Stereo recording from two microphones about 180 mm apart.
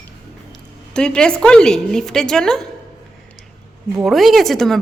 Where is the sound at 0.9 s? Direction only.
5° left (ahead or behind).